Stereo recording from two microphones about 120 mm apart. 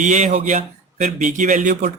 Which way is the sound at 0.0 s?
90° right.